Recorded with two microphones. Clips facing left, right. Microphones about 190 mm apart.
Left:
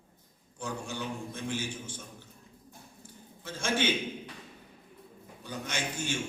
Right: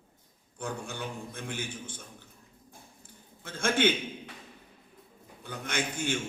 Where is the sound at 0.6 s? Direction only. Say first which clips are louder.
Even; 55° right (ahead or behind).